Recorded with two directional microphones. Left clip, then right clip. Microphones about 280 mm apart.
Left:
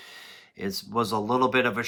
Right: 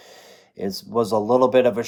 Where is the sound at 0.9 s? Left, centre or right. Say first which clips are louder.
Right 7 dB; left.